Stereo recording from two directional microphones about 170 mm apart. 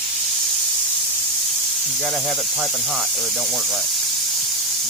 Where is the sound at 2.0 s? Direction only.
Centre (ahead or behind).